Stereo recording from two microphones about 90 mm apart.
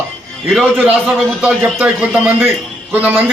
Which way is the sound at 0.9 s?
10° right (ahead or behind).